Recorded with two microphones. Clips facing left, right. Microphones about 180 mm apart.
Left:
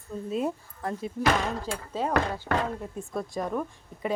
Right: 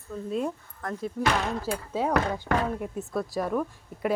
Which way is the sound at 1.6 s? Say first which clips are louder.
Right 2 dB; 10° right (ahead or behind).